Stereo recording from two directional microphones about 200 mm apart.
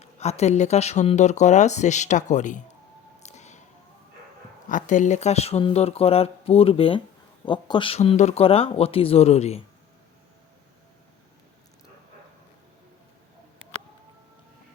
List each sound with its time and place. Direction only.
0.0 s speech: 35° left (ahead or behind)
3.2 s a sound: 35° left (ahead or behind)
4.7 s speech: 40° left (ahead or behind)